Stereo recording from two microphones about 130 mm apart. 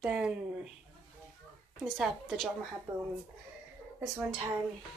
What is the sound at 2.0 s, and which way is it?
Speech, 5° left (ahead or behind).